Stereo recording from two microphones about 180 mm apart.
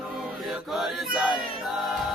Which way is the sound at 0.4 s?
Centre (ahead or behind).